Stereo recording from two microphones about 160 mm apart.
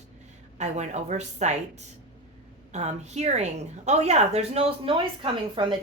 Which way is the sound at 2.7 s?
45° right (ahead or behind).